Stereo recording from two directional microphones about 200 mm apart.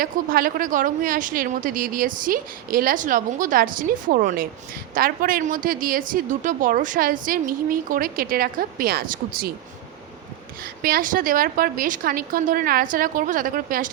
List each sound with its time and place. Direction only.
0.0 s a woman's voice: 45° right (ahead or behind)
10.6 s a woman's voice: 45° right (ahead or behind)